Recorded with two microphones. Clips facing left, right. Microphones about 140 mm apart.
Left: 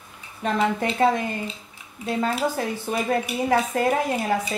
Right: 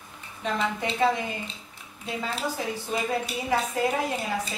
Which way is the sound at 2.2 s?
55° left (ahead or behind).